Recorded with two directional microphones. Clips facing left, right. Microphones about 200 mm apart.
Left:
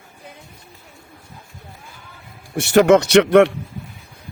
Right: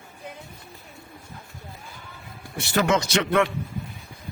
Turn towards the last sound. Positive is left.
turn(degrees=70)  # may be behind; listen again after turning